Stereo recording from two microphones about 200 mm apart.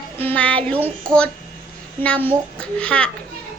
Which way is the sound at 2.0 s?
5° left (ahead or behind).